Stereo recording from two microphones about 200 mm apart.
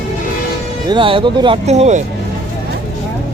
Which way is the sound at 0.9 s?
25° right (ahead or behind).